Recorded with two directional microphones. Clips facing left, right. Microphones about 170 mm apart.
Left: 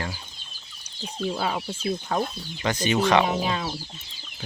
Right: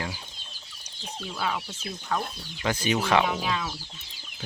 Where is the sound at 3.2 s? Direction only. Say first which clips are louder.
Left 3 dB; 40° left (ahead or behind).